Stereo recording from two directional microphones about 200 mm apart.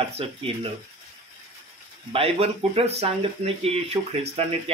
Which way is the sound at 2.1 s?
30° right (ahead or behind).